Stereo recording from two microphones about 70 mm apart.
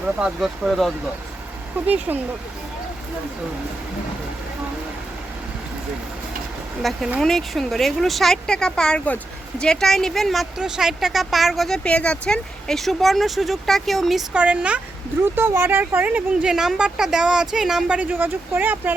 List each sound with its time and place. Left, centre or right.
0.0 s speech: centre
1.9 s speech: right
6.8 s speech: centre
9.0 s speech: left
9.6 s speech: centre
10.6 s speech: centre
11.8 s speech: centre
14.3 s speech: centre
15.2 s speech: right
16.5 s speech: centre; by 18.9 s right